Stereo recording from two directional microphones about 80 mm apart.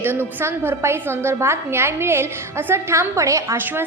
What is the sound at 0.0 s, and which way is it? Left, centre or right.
A woman's voice, right.